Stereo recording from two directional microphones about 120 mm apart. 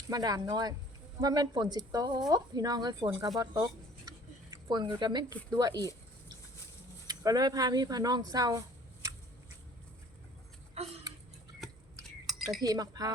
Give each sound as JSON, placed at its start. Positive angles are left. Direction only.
{"t": 0.1, "sound": "speech", "side_deg": -30}
{"t": 7.1, "sound": "speech", "side_deg": -30}
{"t": 10.8, "sound": "tick-tock", "side_deg": -60}
{"t": 11.6, "sound": "a sound", "side_deg": 0}
{"t": 12.6, "sound": "speech", "side_deg": -30}